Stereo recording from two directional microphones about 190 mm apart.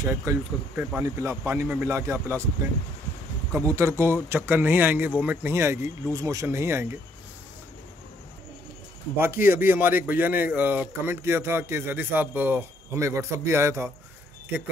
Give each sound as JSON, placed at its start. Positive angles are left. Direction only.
{"t": 0.0, "sound": "speech", "side_deg": -15}
{"t": 3.6, "sound": "speech", "side_deg": -15}
{"t": 9.5, "sound": "speech", "side_deg": -10}